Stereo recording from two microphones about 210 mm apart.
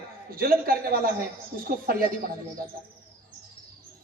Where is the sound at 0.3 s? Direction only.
45° right (ahead or behind).